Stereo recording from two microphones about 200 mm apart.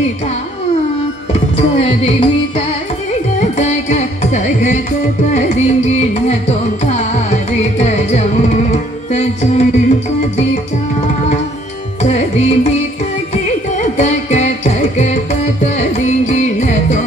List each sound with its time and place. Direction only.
1.6 s music: 30° left (ahead or behind)
3.3 s carnatic music: 35° left (ahead or behind)
6.8 s music: 35° left (ahead or behind)
12.0 s music: 35° left (ahead or behind)